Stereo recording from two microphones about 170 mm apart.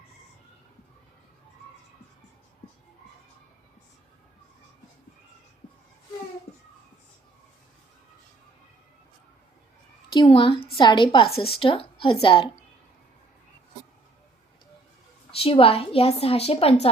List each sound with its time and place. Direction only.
10.1 s a woman's voice: 30° left (ahead or behind)
15.4 s a woman's voice: 35° left (ahead or behind)